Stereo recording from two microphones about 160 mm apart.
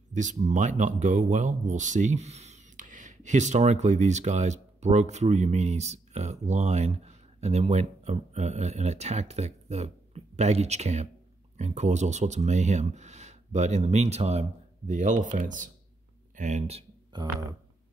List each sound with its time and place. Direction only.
0.1 s speech: 50° right (ahead or behind)
17.1 s speech: 25° right (ahead or behind)